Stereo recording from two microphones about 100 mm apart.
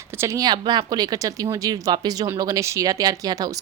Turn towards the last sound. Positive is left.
turn(degrees=-40)  # may be behind; listen again after turning